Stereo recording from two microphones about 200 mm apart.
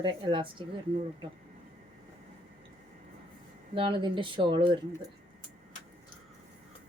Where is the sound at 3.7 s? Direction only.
25° right (ahead or behind).